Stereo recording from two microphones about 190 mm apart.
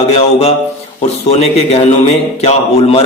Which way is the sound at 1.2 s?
35° left (ahead or behind).